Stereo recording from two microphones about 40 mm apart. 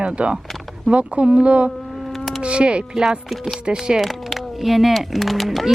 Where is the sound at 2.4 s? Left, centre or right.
Right.